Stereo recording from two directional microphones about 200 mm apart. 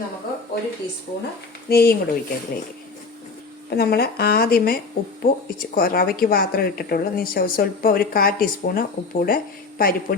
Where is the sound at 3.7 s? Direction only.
50° left (ahead or behind).